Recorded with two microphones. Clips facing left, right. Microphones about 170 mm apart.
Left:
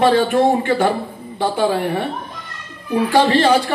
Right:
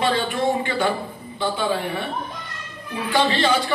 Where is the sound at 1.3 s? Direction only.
65° left (ahead or behind).